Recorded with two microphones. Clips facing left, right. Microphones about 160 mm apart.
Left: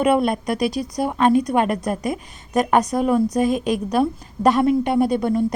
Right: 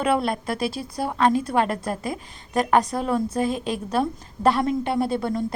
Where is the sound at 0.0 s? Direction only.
20° left (ahead or behind).